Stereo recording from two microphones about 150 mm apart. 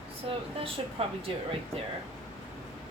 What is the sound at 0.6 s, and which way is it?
Speech, 40° right (ahead or behind).